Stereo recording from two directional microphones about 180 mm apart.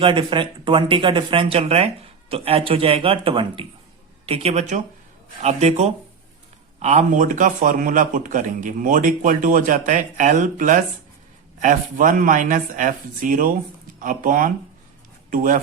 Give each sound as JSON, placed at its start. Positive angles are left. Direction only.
{"t": 0.0, "sound": "a man's voice", "side_deg": -25}